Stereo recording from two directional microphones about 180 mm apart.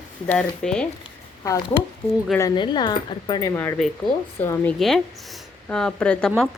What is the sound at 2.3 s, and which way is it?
A woman's voice, 20° left (ahead or behind).